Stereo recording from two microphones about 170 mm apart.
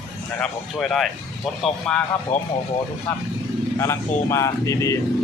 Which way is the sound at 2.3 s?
45° left (ahead or behind).